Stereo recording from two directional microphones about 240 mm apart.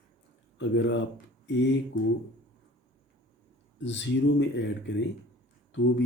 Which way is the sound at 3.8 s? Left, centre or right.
Left.